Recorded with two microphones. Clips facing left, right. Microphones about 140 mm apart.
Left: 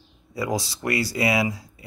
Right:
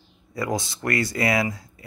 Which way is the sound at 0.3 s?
10° left (ahead or behind).